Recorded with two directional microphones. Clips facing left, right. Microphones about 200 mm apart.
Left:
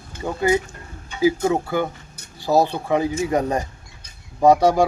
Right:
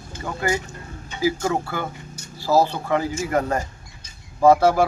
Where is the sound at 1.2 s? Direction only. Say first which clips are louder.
Left 4 dB; 20° left (ahead or behind).